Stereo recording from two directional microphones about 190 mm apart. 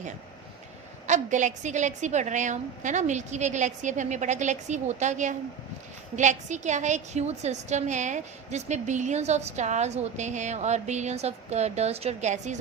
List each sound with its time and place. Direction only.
1.0 s a woman's voice: 40° right (ahead or behind)